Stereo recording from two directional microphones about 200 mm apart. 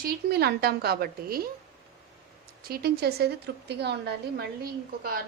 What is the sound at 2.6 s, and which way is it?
A woman's voice, 50° right (ahead or behind).